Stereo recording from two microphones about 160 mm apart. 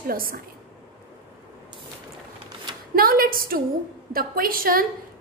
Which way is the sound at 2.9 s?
70° right (ahead or behind).